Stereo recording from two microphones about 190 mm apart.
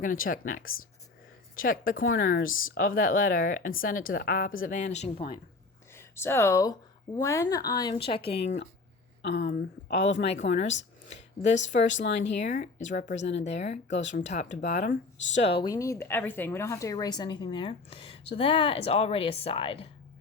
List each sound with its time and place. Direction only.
0.0 s a woman's voice: 45° left (ahead or behind); by 5.4 s 30° left (ahead or behind)
5.9 s speech: 15° left (ahead or behind); by 8.6 s 35° left (ahead or behind)
9.2 s speech: 65° left (ahead or behind)
11.1 s speech: 40° left (ahead or behind)
13.8 s speech: 70° left (ahead or behind)
14.2 s speech: 40° left (ahead or behind)